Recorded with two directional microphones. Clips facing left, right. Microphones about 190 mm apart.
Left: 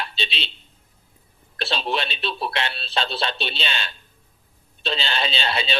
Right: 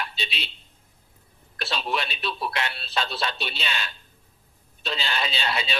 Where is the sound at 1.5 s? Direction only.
30° left (ahead or behind).